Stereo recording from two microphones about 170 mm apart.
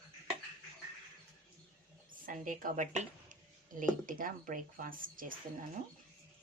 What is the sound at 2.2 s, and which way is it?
Speech, 50° right (ahead or behind).